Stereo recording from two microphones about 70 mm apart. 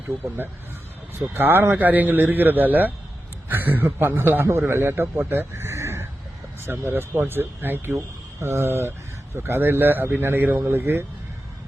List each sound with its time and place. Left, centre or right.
1.3 s speech: right